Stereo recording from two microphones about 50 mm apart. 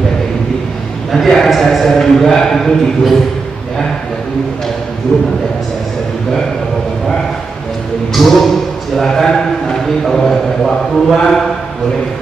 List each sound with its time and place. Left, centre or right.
1.1 s a man's voice: centre
5.1 s a man's voice: centre
8.1 s a man's voice: centre